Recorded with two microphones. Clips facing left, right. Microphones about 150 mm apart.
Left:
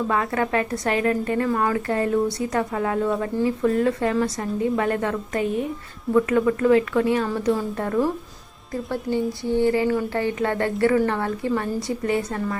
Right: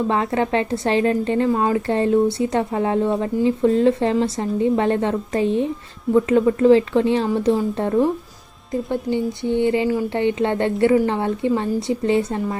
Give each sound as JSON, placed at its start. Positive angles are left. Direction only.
{"t": 0.1, "sound": "a woman's voice", "side_deg": -25}